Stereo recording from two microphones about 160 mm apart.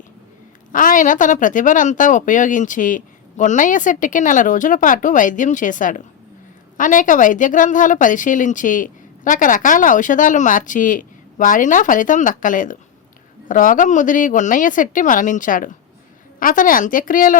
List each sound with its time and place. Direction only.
0.7 s a woman's voice: 55° left (ahead or behind)